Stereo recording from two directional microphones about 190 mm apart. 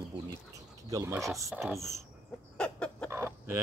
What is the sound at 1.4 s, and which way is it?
Speech, centre (ahead or behind).